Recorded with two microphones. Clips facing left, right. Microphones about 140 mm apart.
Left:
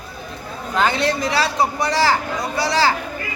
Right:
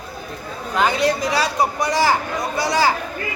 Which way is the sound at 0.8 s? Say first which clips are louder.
Right 1 dB; 10° right (ahead or behind).